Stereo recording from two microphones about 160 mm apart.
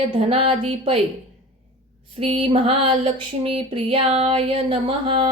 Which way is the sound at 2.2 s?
40° right (ahead or behind).